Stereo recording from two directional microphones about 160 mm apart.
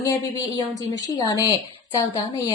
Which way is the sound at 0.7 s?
25° left (ahead or behind).